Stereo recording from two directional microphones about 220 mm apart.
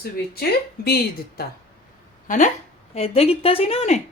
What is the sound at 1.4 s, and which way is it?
A woman's voice, 45° left (ahead or behind).